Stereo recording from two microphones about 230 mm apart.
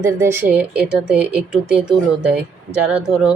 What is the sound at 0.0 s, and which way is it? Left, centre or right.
A woman's voice, centre.